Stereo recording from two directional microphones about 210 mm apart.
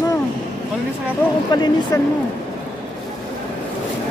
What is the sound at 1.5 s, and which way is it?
Speech, 20° left (ahead or behind).